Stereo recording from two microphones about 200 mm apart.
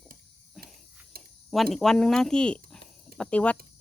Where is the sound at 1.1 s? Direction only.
50° right (ahead or behind).